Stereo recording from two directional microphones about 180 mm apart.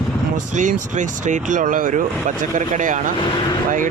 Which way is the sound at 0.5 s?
45° right (ahead or behind).